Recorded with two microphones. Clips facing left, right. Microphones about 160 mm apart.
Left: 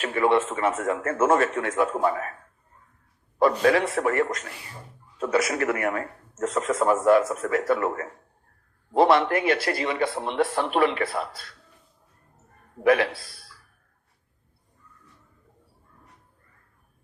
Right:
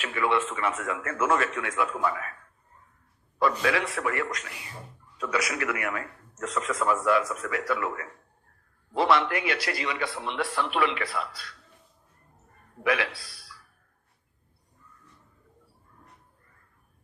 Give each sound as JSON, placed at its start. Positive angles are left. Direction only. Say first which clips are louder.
{"t": 0.0, "sound": "a man's voice", "louder": "left 5 dB", "side_deg": 40}
{"t": 6.7, "sound": "a man's voice", "louder": "left 5 dB", "side_deg": 30}
{"t": 6.9, "sound": "a man's voice", "louder": "left 7 dB", "side_deg": 45}
{"t": 9.1, "sound": "speech", "louder": "left 5 dB", "side_deg": 45}
{"t": 12.8, "sound": "speech", "louder": "left 7 dB", "side_deg": 45}